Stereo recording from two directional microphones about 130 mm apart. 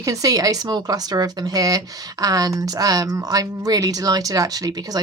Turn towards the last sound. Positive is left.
turn(degrees=-30)  # may be behind; listen again after turning